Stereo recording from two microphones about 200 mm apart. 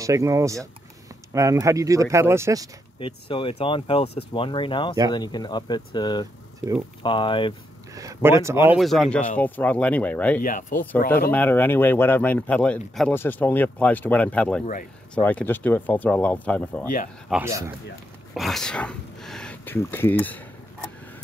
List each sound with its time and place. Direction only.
0.0 s speech: 15° right (ahead or behind)
3.0 s speech: 25° left (ahead or behind)
7.9 s speech: 15° right (ahead or behind)
8.7 s speech: centre (ahead or behind)
10.4 s speech: 40° left (ahead or behind)
11.2 s speech: 10° left (ahead or behind)